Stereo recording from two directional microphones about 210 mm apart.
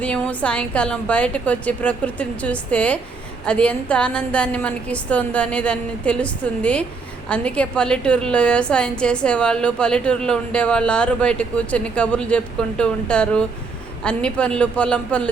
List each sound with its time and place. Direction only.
0.0 s a woman's voice: 5° left (ahead or behind)